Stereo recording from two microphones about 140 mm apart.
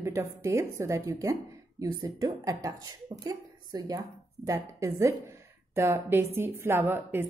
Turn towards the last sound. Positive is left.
turn(degrees=-15)  # may be behind; listen again after turning